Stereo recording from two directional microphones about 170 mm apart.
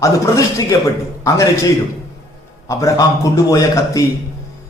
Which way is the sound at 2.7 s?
20° left (ahead or behind).